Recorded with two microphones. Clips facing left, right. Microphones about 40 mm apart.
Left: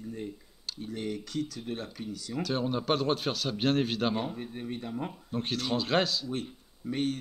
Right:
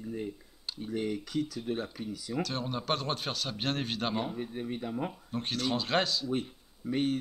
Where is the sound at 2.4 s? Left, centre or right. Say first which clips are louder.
Left 8 dB; centre.